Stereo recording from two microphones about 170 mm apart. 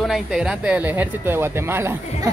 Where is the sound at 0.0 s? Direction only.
Centre (ahead or behind).